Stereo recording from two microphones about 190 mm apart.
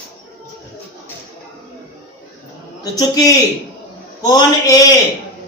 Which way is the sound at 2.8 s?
20° left (ahead or behind).